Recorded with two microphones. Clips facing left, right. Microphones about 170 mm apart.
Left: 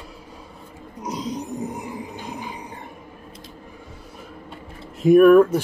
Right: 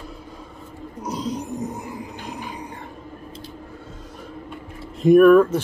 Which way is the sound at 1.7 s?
20° left (ahead or behind).